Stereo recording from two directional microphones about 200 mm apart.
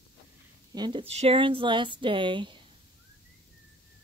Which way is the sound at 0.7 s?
25° right (ahead or behind).